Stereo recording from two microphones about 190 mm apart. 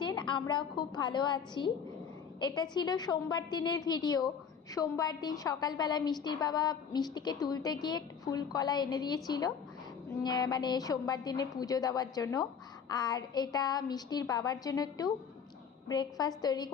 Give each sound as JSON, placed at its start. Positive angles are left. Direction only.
{"t": 0.0, "sound": "a woman's voice", "side_deg": 25}